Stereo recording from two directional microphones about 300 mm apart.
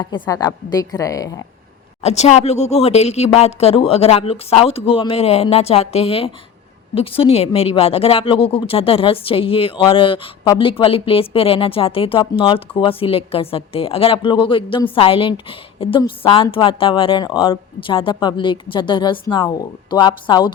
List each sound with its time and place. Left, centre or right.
0.0 s a woman's voice: centre